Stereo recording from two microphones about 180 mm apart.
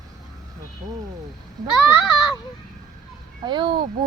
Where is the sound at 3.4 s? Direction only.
25° right (ahead or behind).